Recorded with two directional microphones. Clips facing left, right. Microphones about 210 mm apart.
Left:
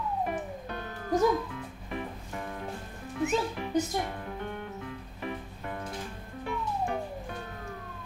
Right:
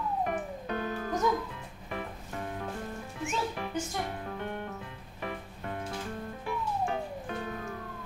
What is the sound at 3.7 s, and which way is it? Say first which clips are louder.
Speech: left 9 dB; 35° left (ahead or behind).